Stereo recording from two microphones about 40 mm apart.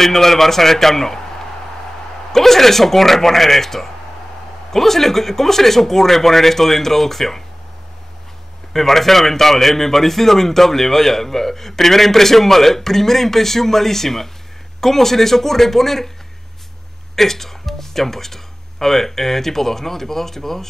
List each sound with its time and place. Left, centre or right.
0.0 s a man's voice: centre
2.3 s a man's voice: centre
8.7 s a man's voice: centre
17.1 s a man's voice: centre